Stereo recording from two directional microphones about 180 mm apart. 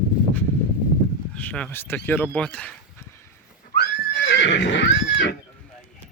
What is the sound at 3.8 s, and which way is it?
Neigh, 75° left (ahead or behind).